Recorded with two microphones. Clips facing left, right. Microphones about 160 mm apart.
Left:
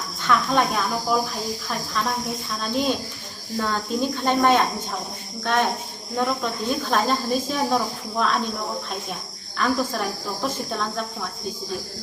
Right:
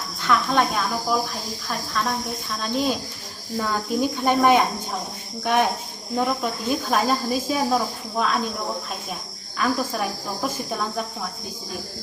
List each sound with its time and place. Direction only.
0.3 s a woman's voice: centre (ahead or behind)
2.6 s a woman's voice: centre (ahead or behind)
9.6 s speech: 10° right (ahead or behind)